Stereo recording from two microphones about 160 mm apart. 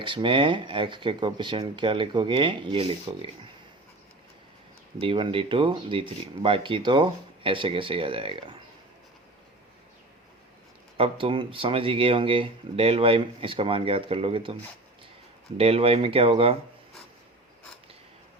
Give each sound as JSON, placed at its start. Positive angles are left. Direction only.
{"t": 0.0, "sound": "speech", "side_deg": -30}
{"t": 4.9, "sound": "speech", "side_deg": -35}
{"t": 10.9, "sound": "speech", "side_deg": -35}
{"t": 15.5, "sound": "speech", "side_deg": -40}